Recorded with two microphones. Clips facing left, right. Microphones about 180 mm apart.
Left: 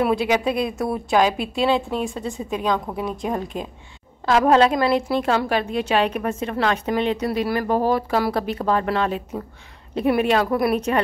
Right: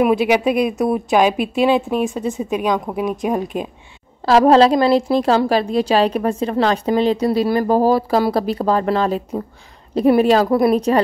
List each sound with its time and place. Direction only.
0.0 s a woman's voice: 20° right (ahead or behind)
4.3 s a woman's voice: 35° right (ahead or behind)